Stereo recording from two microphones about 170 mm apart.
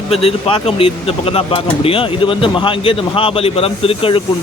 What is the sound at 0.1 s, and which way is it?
Speech, 35° left (ahead or behind).